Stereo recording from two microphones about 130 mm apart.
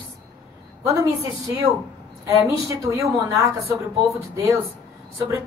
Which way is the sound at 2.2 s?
25° right (ahead or behind).